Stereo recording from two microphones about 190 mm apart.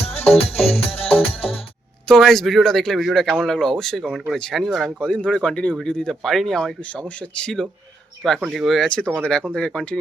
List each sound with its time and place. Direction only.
0.5 s music: 30° left (ahead or behind)
2.0 s speech: centre (ahead or behind)